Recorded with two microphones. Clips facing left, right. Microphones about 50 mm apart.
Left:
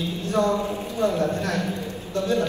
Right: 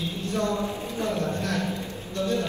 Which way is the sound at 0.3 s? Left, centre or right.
Left.